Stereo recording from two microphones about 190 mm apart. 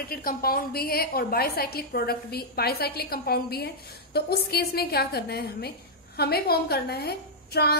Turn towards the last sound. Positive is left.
turn(degrees=55)  # may be behind; listen again after turning